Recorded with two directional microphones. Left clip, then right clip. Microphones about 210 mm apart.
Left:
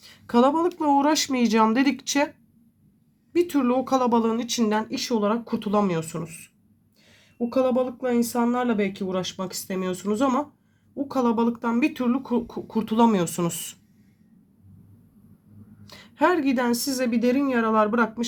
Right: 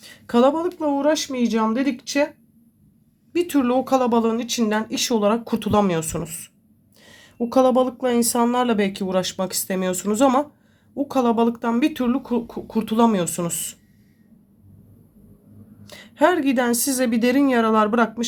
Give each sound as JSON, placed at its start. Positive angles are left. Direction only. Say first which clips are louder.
{"t": 0.0, "sound": "a sound", "louder": "right 3 dB", "side_deg": 0}
{"t": 0.8, "sound": "speech", "louder": "even", "side_deg": 15}
{"t": 3.3, "sound": "speech", "louder": "right 2 dB", "side_deg": -5}
{"t": 15.9, "sound": "speech", "louder": "right 3 dB", "side_deg": 0}